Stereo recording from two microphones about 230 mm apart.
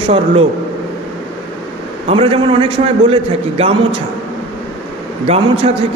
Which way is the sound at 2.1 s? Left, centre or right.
Right.